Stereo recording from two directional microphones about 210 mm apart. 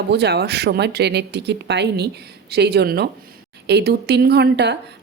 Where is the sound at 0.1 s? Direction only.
50° right (ahead or behind).